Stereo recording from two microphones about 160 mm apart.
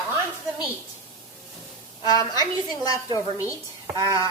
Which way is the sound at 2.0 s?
25° left (ahead or behind).